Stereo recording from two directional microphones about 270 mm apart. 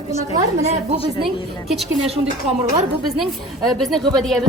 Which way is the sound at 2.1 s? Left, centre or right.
Right.